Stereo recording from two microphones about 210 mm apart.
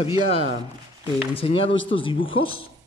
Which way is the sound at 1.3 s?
25° left (ahead or behind).